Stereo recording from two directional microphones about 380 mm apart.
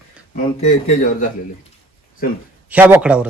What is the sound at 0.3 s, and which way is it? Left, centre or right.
Speech, centre.